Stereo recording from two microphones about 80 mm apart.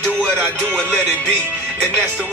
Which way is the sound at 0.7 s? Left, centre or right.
Centre.